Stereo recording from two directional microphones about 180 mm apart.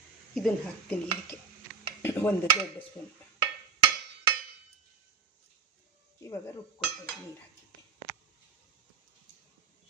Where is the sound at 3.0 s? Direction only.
5° left (ahead or behind).